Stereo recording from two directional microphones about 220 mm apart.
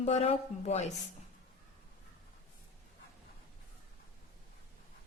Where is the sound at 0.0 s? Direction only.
30° left (ahead or behind).